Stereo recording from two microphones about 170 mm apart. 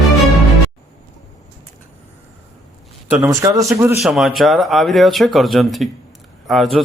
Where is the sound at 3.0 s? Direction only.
10° right (ahead or behind).